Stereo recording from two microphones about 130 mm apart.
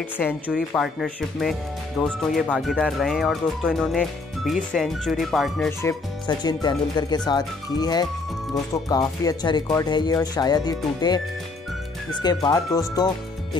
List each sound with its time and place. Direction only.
0.5 s speech: 5° right (ahead or behind)
5.7 s speech: 20° left (ahead or behind)
6.2 s speech: 30° left (ahead or behind)